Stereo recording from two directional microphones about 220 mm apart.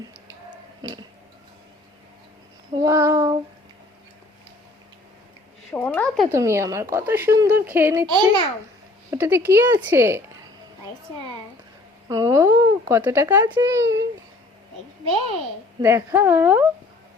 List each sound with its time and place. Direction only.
0.5 s a sound: 20° right (ahead or behind)
2.7 s child singing: 15° right (ahead or behind)
5.7 s speech: 5° left (ahead or behind)
6.3 s speech: 10° right (ahead or behind)
12.0 s speech: 15° right (ahead or behind)
15.8 s speech: 10° right (ahead or behind)